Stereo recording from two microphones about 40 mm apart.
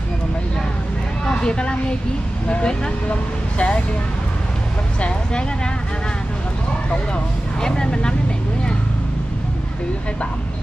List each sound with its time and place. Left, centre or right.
1.3 s a woman's voice: left
7.6 s speech: centre